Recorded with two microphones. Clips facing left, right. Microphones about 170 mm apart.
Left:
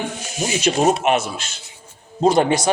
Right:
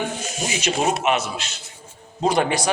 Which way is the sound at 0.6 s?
50° left (ahead or behind).